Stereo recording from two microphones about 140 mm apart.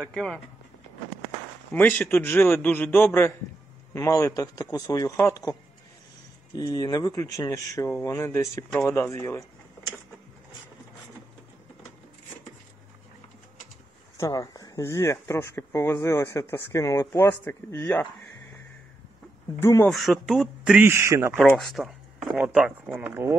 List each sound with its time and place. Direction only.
0.1 s a man's voice: 5° left (ahead or behind)
1.7 s a man's voice: 15° left (ahead or behind)
14.1 s speech: 25° left (ahead or behind)
19.6 s speech: 20° left (ahead or behind)
19.9 s a man's voice: centre (ahead or behind)
20.8 s a man's voice: 20° right (ahead or behind)
21.5 s a man's voice: centre (ahead or behind)